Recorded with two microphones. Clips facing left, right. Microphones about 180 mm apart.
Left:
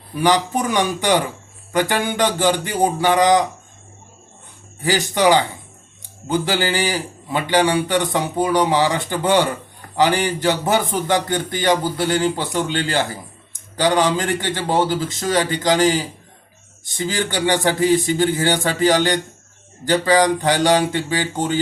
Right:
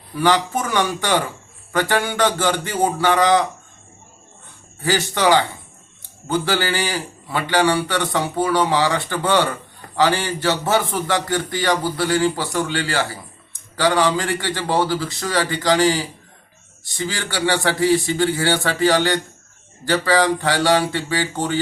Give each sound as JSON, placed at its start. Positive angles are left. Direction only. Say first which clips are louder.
{"t": 0.1, "sound": "a man's voice", "louder": "left 1 dB", "side_deg": 15}
{"t": 4.8, "sound": "a man's voice", "louder": "left 2 dB", "side_deg": 15}